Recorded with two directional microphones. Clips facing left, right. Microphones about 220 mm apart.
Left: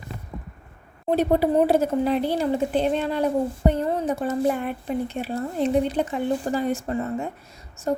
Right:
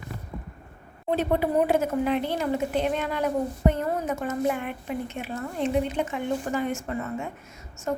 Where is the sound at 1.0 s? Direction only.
40° left (ahead or behind).